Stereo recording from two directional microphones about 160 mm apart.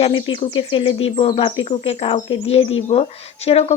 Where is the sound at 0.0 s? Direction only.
30° left (ahead or behind).